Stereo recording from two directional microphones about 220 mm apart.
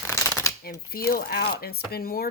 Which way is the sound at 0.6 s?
45° left (ahead or behind).